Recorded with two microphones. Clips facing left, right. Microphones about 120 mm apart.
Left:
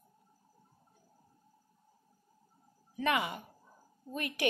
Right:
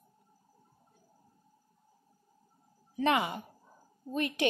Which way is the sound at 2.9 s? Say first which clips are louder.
Right 3 dB; 30° right (ahead or behind).